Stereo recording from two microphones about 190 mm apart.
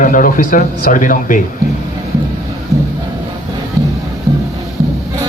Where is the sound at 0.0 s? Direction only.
45° left (ahead or behind).